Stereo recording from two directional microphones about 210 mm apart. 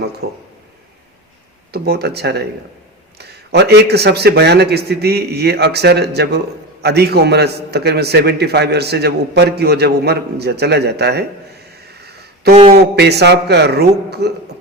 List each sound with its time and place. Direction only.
0.2 s a man's voice: 50° right (ahead or behind)
1.7 s a man's voice: 50° right (ahead or behind)
12.7 s a man's voice: 50° right (ahead or behind)